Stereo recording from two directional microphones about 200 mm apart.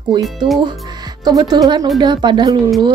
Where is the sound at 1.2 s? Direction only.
20° right (ahead or behind).